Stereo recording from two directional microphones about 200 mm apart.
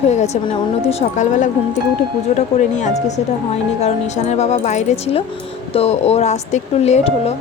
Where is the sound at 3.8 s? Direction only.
35° left (ahead or behind).